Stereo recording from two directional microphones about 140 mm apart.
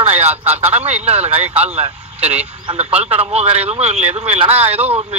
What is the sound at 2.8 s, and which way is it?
A man's voice, 50° right (ahead or behind).